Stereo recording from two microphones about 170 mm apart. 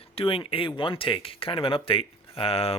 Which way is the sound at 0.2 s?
35° left (ahead or behind).